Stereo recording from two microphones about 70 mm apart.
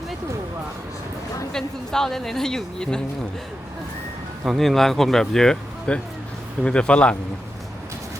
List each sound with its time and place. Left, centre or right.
1.5 s a woman's voice: centre
4.4 s a woman's voice: centre